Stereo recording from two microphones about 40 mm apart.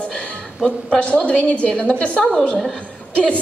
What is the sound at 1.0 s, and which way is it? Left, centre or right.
A woman's voice, left.